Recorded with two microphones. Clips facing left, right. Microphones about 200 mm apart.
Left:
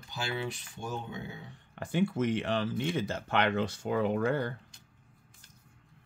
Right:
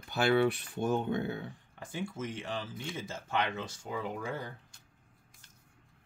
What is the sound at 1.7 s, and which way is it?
Speech, 65° left (ahead or behind).